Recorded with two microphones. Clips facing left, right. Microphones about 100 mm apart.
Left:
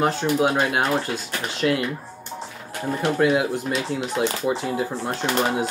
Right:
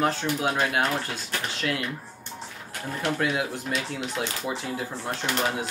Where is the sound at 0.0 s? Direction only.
20° left (ahead or behind).